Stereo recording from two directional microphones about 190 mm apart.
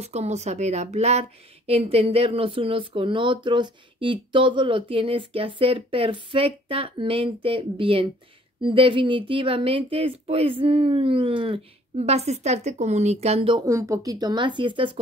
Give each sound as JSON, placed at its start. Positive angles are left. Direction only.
{"t": 0.0, "sound": "speech", "side_deg": -35}